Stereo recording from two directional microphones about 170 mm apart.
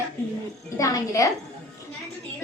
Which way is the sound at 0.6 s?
20° left (ahead or behind).